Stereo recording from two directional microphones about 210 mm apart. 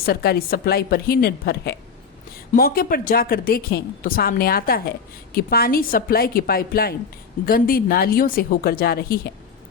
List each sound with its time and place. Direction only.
0.0 s a woman's voice: 45° left (ahead or behind)